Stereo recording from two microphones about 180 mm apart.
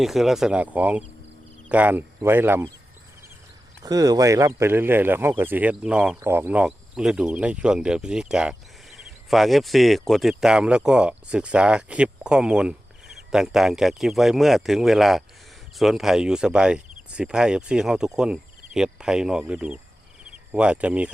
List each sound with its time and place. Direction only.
0.0 s speech: centre (ahead or behind)
3.8 s speech: 20° right (ahead or behind)